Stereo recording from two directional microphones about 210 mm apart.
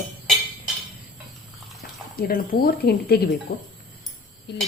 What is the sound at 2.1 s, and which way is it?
Speech, 45° left (ahead or behind).